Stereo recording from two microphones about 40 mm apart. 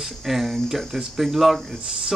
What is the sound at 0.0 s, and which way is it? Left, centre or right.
Speech, centre.